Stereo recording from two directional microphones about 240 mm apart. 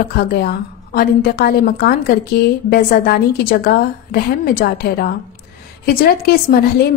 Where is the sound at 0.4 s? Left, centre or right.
Left.